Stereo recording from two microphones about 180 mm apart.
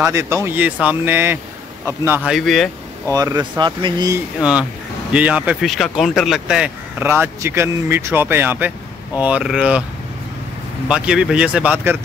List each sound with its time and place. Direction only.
0.0 s speech: 15° right (ahead or behind)
2.3 s speech: centre (ahead or behind)
3.1 s speech: 20° right (ahead or behind)
4.4 s speech: 5° right (ahead or behind)
10.9 s speech: 5° right (ahead or behind)